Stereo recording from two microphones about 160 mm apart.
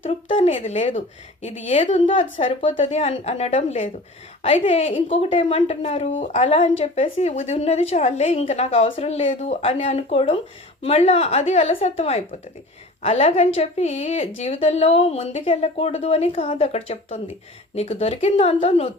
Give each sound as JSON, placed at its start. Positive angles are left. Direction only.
{"t": 0.0, "sound": "a woman's voice", "side_deg": 35}